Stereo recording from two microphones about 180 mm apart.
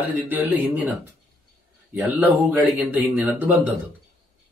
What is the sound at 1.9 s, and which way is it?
Speech, 10° right (ahead or behind).